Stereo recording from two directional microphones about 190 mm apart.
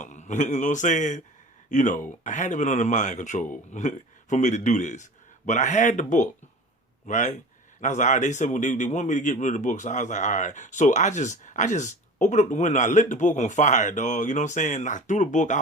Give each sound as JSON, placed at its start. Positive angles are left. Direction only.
{"t": 0.0, "sound": "a man's voice", "side_deg": 40}